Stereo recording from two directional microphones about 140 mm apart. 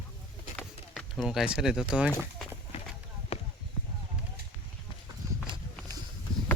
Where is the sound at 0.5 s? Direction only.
5° left (ahead or behind).